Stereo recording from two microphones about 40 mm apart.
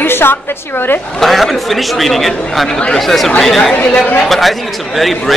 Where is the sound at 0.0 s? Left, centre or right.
Left.